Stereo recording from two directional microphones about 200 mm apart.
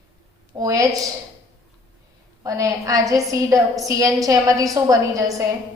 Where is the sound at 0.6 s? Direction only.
15° right (ahead or behind).